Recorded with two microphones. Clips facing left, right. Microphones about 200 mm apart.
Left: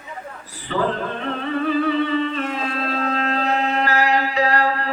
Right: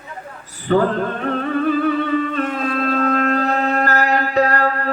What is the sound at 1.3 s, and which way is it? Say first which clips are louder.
Music: right 2 dB; 50° right (ahead or behind).